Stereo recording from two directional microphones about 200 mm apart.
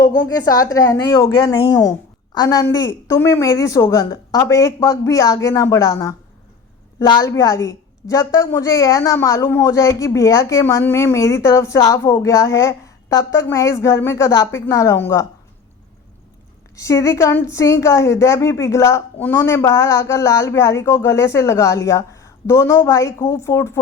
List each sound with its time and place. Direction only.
0.0 s a woman's voice: 20° left (ahead or behind)
16.7 s a woman's voice: 15° left (ahead or behind)